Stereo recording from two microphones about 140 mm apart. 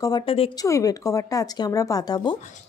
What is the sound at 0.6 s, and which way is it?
Speech, 25° left (ahead or behind).